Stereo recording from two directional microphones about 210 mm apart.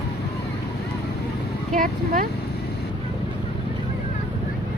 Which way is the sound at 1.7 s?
40° right (ahead or behind).